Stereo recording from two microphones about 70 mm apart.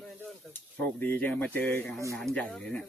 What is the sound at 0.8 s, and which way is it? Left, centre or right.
Speech, left.